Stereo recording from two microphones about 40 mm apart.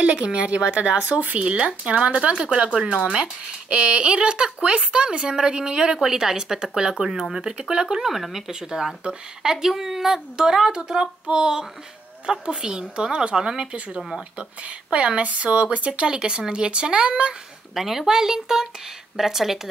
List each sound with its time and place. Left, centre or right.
0.0 s speech: right
1.4 s speech: right
17.7 s speech: centre